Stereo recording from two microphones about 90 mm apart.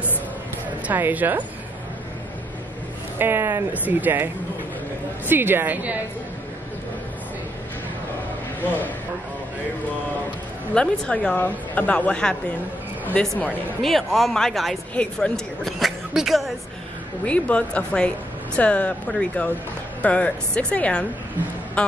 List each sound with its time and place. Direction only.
0.8 s speech: 20° right (ahead or behind)
3.2 s speech: 25° right (ahead or behind)
5.3 s speech: 20° right (ahead or behind)
8.6 s speech: 20° left (ahead or behind)
10.7 s speech: 10° left (ahead or behind)
17.3 s speech: 15° left (ahead or behind)